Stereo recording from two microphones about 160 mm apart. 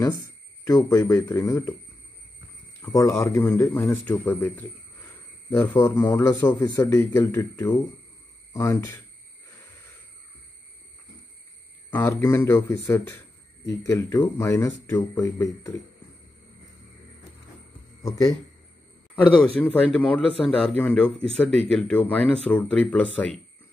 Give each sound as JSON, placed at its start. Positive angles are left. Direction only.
{"t": 0.9, "sound": "a man's voice", "side_deg": 20}
{"t": 2.8, "sound": "a man's voice", "side_deg": 20}
{"t": 11.9, "sound": "speech", "side_deg": 15}
{"t": 18.0, "sound": "a man's voice", "side_deg": 25}
{"t": 19.2, "sound": "speech", "side_deg": 10}